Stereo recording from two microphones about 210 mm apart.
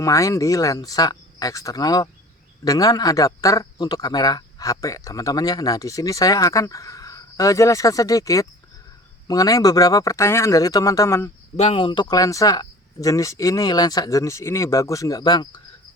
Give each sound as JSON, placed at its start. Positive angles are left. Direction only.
{"t": 0.0, "sound": "speech", "side_deg": 15}
{"t": 11.5, "sound": "speech", "side_deg": 30}